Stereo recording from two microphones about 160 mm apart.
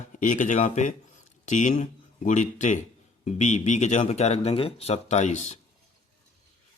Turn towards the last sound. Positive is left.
turn(degrees=45)  # may be behind; listen again after turning